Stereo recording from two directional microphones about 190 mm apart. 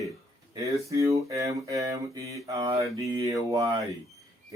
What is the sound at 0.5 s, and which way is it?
Mantra, 15° right (ahead or behind).